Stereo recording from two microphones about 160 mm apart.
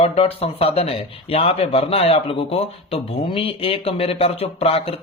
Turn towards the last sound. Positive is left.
turn(degrees=35)  # may be behind; listen again after turning